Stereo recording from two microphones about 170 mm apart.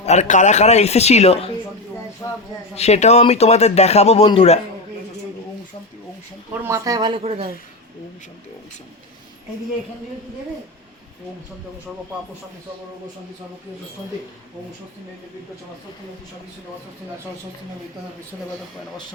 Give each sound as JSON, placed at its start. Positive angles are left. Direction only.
{"t": 0.0, "sound": "speech", "side_deg": 40}
{"t": 2.2, "sound": "a sound", "side_deg": 15}
{"t": 2.7, "sound": "speech", "side_deg": 40}
{"t": 6.6, "sound": "speech", "side_deg": -20}
{"t": 7.2, "sound": "a woman's voice", "side_deg": -40}